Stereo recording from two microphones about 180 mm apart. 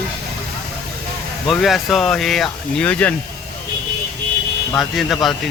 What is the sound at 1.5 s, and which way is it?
Speech, centre (ahead or behind).